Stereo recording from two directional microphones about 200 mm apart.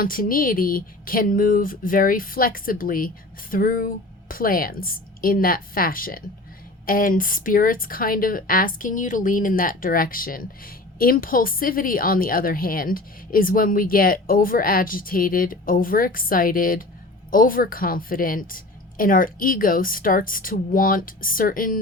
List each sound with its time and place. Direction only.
0.0 s speech: 45° left (ahead or behind)